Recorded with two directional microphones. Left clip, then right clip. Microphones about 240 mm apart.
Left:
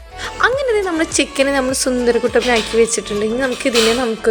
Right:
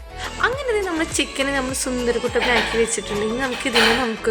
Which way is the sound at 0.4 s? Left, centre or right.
Centre.